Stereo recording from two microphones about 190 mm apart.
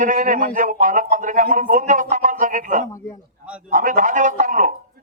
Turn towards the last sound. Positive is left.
turn(degrees=-40)  # may be behind; listen again after turning